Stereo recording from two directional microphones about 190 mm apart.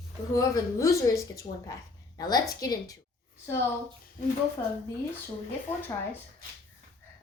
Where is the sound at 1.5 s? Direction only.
40° left (ahead or behind).